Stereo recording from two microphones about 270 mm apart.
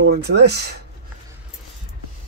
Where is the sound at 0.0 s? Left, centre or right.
Right.